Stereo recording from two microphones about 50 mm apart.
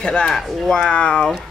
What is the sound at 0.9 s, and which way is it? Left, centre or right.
Speech, left.